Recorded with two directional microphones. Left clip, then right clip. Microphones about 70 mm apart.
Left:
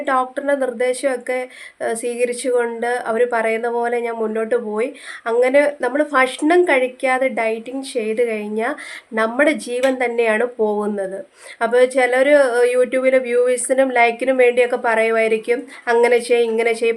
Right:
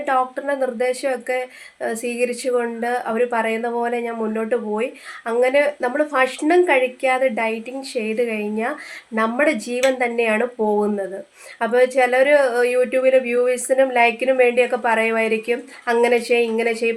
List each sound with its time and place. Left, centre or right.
0.0 s speech: left